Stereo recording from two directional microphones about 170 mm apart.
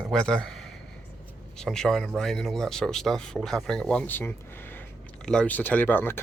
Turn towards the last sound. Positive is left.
turn(degrees=10)  # may be behind; listen again after turning